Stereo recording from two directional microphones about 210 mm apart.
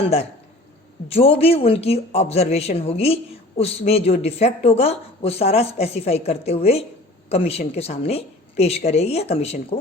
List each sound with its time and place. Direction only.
1.0 s speech: 30° left (ahead or behind)